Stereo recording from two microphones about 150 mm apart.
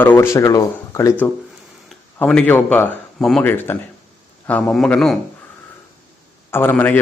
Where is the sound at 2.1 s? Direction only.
10° left (ahead or behind).